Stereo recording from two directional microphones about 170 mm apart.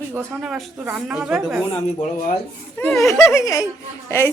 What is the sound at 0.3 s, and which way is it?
A woman's voice, centre (ahead or behind).